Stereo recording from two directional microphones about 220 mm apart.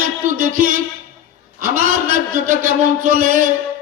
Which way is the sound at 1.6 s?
40° right (ahead or behind).